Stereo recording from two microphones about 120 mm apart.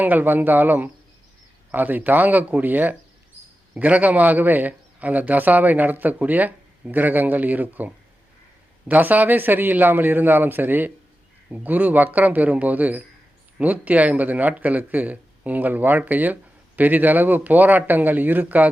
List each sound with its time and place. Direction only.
0.0 s speech: 15° right (ahead or behind)